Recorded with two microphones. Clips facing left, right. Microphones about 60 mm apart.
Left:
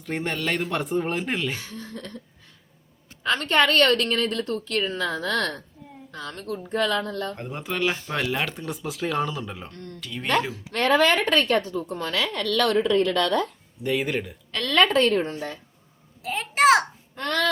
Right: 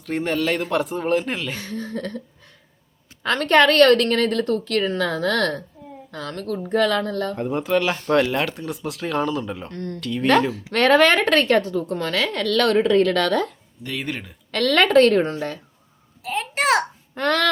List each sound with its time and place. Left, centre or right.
0.0 s speech: centre
1.5 s a woman's voice: right
7.3 s speech: centre
9.7 s a woman's voice: right
10.0 s speech: centre
10.5 s speech: right
13.8 s speech: centre
14.5 s speech: right
16.2 s a sound: centre
17.2 s a woman's voice: right